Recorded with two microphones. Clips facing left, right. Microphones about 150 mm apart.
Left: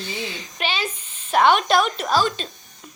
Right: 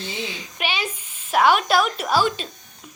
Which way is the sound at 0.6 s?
10° right (ahead or behind).